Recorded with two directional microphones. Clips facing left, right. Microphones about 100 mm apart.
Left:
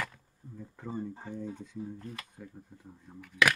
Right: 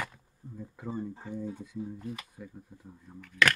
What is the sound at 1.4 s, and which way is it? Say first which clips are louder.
Speech: right 3 dB; 10° right (ahead or behind).